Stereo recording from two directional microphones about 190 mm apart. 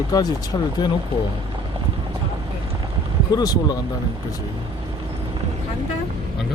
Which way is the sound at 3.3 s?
20° left (ahead or behind).